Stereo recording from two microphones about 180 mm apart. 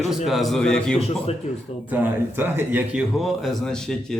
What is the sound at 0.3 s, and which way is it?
Speech, centre (ahead or behind).